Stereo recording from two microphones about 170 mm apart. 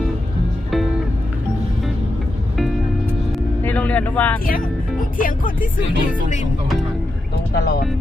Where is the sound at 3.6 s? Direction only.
10° left (ahead or behind).